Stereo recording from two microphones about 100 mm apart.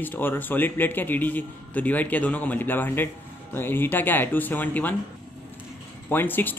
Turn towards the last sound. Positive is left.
turn(degrees=20)  # may be behind; listen again after turning